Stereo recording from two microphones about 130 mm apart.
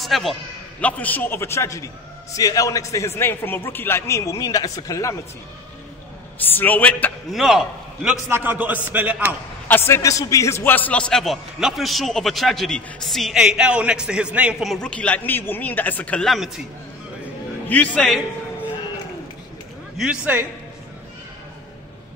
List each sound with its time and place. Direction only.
0.0 s a man's voice: centre (ahead or behind); by 5.1 s 25° left (ahead or behind)
6.4 s a man's voice: 15° left (ahead or behind)
7.2 s a man's voice: centre (ahead or behind)
8.3 s a man's voice: 15° right (ahead or behind)
9.7 s a man's voice: 20° left (ahead or behind); by 16.6 s centre (ahead or behind)
17.6 s a man's voice: 10° left (ahead or behind)
20.0 s a man's voice: 10° right (ahead or behind)